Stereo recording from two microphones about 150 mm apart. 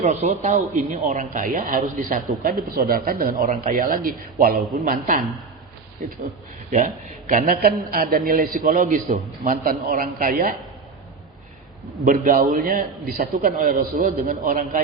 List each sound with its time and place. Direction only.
0.0 s speech: 50° right (ahead or behind)
6.7 s a man's voice: 60° right (ahead or behind)
12.0 s a man's voice: 70° right (ahead or behind)